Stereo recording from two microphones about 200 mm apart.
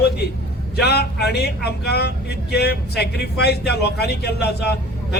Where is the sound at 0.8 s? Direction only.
55° left (ahead or behind).